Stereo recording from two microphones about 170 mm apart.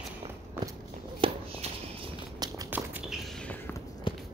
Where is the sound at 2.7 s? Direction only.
10° right (ahead or behind).